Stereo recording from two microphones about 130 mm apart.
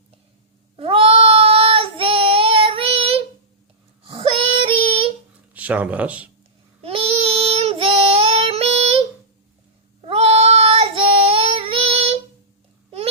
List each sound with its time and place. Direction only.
0.8 s child singing: 45° right (ahead or behind)
5.5 s speech: 10° right (ahead or behind)
6.8 s child singing: 50° right (ahead or behind)
10.0 s child singing: 50° right (ahead or behind)